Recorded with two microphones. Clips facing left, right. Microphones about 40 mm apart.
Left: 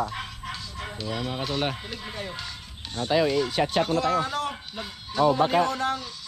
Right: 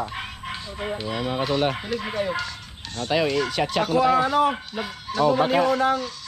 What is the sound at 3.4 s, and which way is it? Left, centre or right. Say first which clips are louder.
Speech: right 1 dB; right.